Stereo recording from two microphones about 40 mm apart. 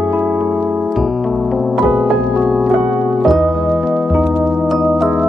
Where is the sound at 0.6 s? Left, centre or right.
Right.